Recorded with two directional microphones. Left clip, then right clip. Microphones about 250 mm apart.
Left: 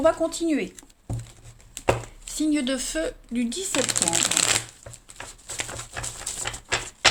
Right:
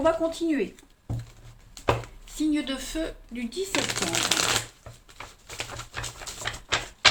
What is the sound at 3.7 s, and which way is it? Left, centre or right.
Speech, left.